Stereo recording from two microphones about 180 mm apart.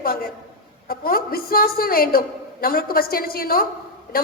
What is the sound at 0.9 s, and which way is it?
A woman's voice, 55° left (ahead or behind).